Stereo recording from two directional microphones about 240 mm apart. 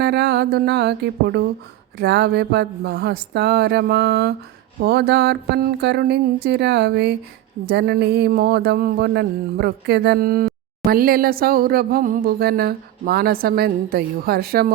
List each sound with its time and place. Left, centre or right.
0.0 s speech: right